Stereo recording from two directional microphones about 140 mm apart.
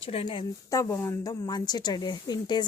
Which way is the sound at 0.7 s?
20° left (ahead or behind).